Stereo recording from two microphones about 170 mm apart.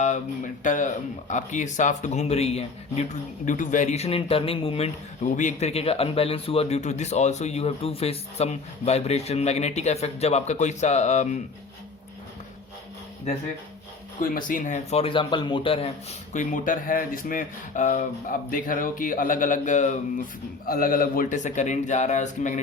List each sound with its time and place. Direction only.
0.0 s speech: 45° left (ahead or behind)
14.2 s speech: 55° left (ahead or behind); by 15.9 s 30° left (ahead or behind)
16.3 s speech: 50° left (ahead or behind)
20.7 s speech: 55° left (ahead or behind)